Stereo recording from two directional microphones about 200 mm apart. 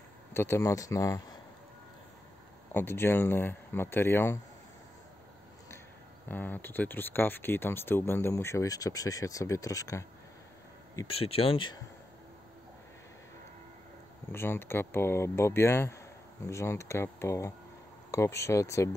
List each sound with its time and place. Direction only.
0.3 s speech: 10° left (ahead or behind)
2.7 s speech: 10° left (ahead or behind)
6.2 s speech: 10° left (ahead or behind)
11.1 s speech: 30° left (ahead or behind)
14.3 s speech: 10° left (ahead or behind)